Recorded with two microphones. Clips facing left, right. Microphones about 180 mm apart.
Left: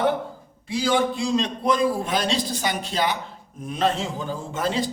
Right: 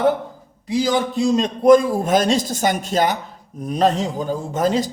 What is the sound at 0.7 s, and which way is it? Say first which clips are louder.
A man's voice: right 3 dB; 45° right (ahead or behind).